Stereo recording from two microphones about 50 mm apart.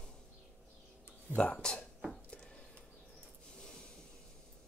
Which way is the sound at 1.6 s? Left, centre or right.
Centre.